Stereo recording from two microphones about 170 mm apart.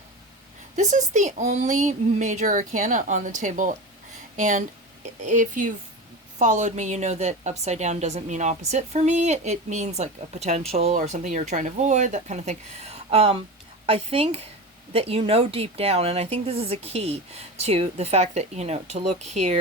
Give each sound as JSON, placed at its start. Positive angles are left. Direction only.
{"t": 0.8, "sound": "a woman's voice", "side_deg": -45}